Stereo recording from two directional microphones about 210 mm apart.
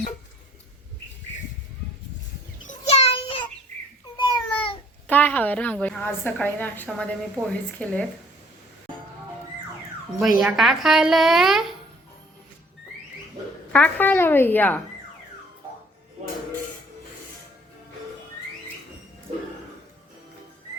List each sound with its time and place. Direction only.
2.6 s child singing: 30° left (ahead or behind)
4.2 s babbling: 25° left (ahead or behind)
5.0 s a woman's voice: 10° left (ahead or behind)
10.2 s a woman's voice: centre (ahead or behind)
13.7 s a woman's voice: 5° left (ahead or behind)